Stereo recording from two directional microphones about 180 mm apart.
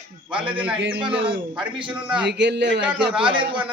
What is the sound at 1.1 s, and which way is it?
Speech, 30° right (ahead or behind).